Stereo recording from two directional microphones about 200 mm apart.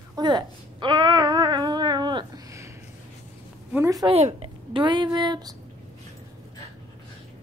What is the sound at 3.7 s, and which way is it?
Speech, 15° right (ahead or behind).